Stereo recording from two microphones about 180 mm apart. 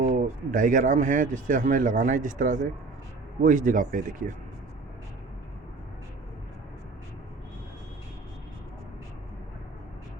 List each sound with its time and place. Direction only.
0.1 s speech: 45° right (ahead or behind)